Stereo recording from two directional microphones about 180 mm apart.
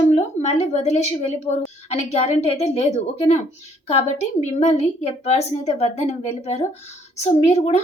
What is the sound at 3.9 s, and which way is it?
A woman's voice, 35° left (ahead or behind).